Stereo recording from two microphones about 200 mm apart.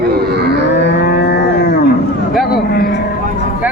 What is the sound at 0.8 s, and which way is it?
Livestock, 55° left (ahead or behind).